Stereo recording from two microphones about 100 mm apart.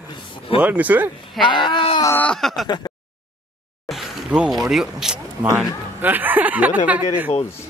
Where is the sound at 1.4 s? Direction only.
50° left (ahead or behind).